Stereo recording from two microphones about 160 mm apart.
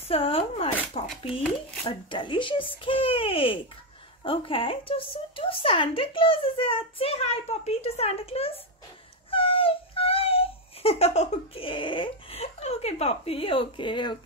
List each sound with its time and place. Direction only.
0.1 s speech: 35° left (ahead or behind)
9.3 s wail: 35° left (ahead or behind)